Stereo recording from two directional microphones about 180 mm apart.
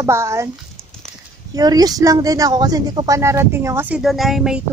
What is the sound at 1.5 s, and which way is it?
Speech, 20° right (ahead or behind).